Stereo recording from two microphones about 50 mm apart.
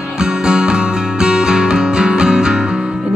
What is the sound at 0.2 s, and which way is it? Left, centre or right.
Music, centre.